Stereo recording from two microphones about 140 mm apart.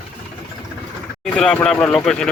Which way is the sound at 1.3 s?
5° left (ahead or behind).